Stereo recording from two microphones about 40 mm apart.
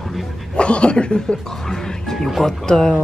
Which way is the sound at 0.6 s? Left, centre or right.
Left.